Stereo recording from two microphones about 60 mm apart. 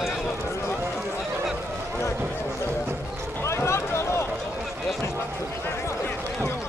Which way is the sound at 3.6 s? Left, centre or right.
Left.